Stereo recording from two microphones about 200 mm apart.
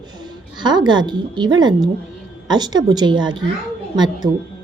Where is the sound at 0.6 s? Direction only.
20° right (ahead or behind).